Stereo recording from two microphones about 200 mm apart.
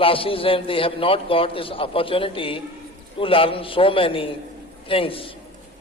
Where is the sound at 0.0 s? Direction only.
25° left (ahead or behind).